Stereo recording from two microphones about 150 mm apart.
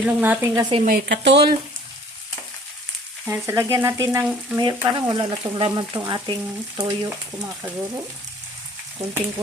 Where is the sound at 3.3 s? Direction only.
20° right (ahead or behind).